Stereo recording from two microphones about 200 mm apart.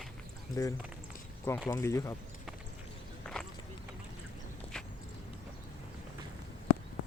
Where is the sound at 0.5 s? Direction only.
15° left (ahead or behind).